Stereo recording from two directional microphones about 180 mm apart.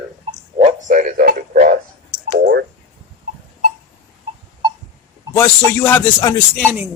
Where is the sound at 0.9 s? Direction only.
45° right (ahead or behind).